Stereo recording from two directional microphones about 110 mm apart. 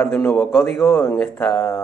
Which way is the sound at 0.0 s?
10° left (ahead or behind).